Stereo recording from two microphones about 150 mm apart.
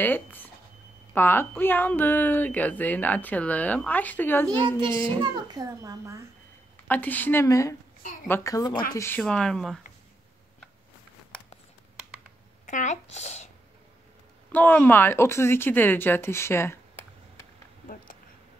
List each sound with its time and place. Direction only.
0.0 s speech: 10° left (ahead or behind)
4.5 s a child's voice: 30° right (ahead or behind)
6.9 s a woman's voice: 10° left (ahead or behind)
8.9 s speech: 15° left (ahead or behind)
9.2 s speech: 5° left (ahead or behind)
12.6 s speech: 55° left (ahead or behind)
14.5 s speech: 10° left (ahead or behind)